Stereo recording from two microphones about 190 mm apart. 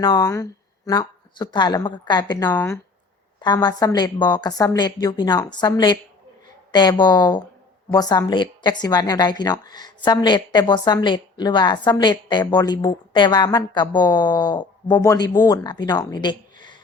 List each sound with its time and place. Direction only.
0.0 s a woman's voice: 20° left (ahead or behind)
2.5 s speech: 10° left (ahead or behind)
3.4 s a woman's voice: 20° left (ahead or behind)